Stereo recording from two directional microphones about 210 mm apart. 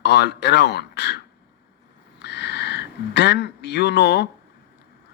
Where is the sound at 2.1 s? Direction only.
55° left (ahead or behind).